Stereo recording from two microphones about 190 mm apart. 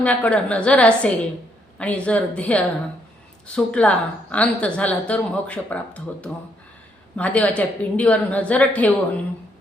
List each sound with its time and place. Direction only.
0.0 s a woman's voice: 5° left (ahead or behind)